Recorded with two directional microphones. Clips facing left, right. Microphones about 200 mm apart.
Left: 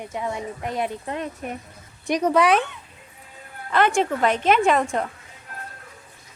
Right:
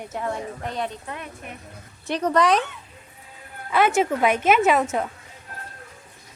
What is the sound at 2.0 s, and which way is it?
Speech, 10° left (ahead or behind).